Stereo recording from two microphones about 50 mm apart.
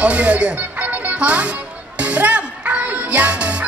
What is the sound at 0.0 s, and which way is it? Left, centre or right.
Speech, right.